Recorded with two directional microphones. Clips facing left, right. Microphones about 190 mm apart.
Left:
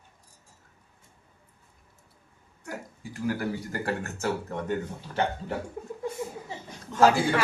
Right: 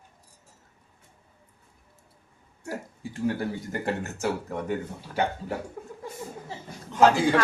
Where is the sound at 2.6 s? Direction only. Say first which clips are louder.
Right 4 dB; 30° right (ahead or behind).